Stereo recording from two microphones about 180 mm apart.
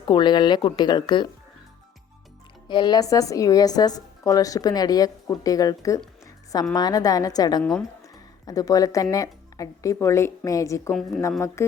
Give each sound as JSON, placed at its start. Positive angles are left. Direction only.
{"t": 0.0, "sound": "a woman's voice", "side_deg": 25}
{"t": 2.6, "sound": "a woman's voice", "side_deg": 25}
{"t": 7.6, "sound": "speech", "side_deg": 5}
{"t": 8.1, "sound": "speech", "side_deg": 20}